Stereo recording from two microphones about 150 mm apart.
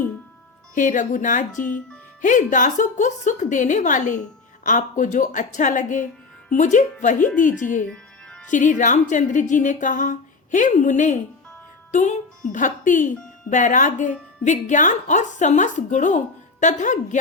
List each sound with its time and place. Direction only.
0.7 s a woman's voice: 60° left (ahead or behind)
11.9 s music: 55° left (ahead or behind)
12.5 s a woman's voice: 60° left (ahead or behind)